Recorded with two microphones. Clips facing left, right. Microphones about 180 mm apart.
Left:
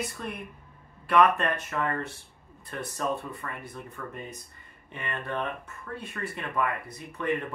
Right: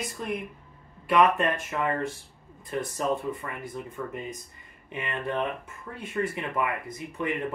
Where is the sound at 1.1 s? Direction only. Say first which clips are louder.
Right 1 dB; 15° right (ahead or behind).